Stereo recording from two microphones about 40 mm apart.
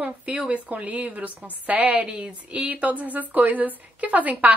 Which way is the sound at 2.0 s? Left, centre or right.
Right.